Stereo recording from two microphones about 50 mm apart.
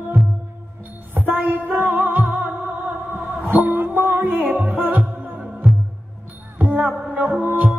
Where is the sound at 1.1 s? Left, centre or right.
Right.